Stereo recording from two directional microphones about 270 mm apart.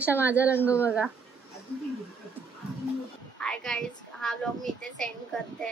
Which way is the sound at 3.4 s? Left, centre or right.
Centre.